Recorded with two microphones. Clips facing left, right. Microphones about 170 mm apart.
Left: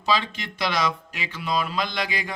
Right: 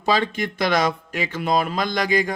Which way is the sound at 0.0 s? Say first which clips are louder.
Right 4 dB; 50° right (ahead or behind).